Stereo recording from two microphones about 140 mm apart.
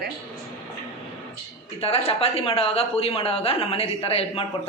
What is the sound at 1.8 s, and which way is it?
Speech, 45° left (ahead or behind).